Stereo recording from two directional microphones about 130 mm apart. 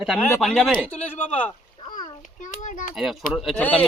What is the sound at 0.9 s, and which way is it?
Speech, 10° left (ahead or behind).